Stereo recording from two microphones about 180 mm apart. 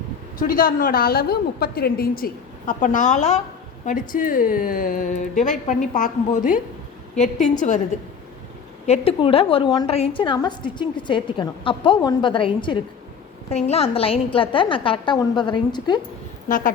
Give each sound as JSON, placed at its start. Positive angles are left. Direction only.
{"t": 0.3, "sound": "a woman's voice", "side_deg": 50}
{"t": 7.9, "sound": "a woman's voice", "side_deg": 40}
{"t": 16.5, "sound": "a woman's voice", "side_deg": 50}